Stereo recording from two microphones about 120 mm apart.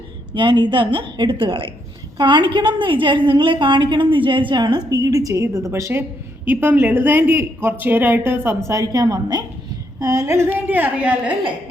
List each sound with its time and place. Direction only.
0.3 s a woman's voice: 40° right (ahead or behind); by 11.3 s 10° right (ahead or behind)